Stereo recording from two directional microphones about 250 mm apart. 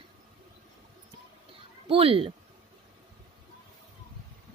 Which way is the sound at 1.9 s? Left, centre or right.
Right.